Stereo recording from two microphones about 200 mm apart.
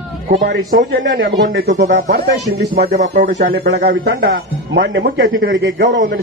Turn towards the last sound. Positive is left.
turn(degrees=-65)  # may be behind; listen again after turning